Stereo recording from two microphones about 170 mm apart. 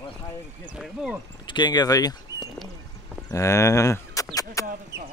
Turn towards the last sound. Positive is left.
turn(degrees=20)  # may be behind; listen again after turning